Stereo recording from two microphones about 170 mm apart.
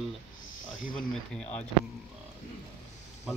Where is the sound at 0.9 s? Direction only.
5° left (ahead or behind).